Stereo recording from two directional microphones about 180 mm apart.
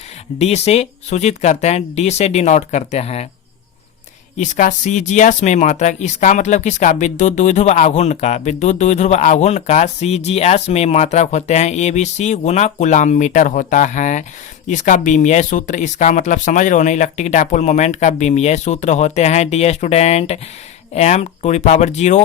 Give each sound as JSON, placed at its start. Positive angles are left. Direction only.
{"t": 0.3, "sound": "speech", "side_deg": 35}
{"t": 4.4, "sound": "speech", "side_deg": 45}